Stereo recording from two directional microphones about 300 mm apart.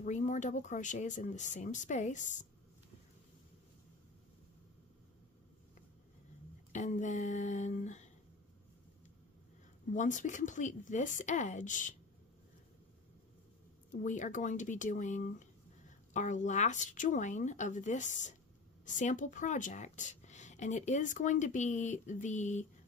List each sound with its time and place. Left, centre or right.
0.0 s speech: left
6.7 s speech: left
9.9 s speech: left
14.0 s speech: left